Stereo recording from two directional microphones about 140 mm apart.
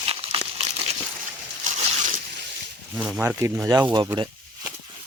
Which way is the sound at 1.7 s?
65° right (ahead or behind).